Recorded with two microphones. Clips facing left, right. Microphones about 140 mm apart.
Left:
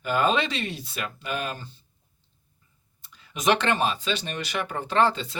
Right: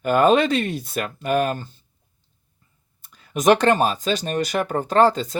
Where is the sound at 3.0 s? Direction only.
50° right (ahead or behind).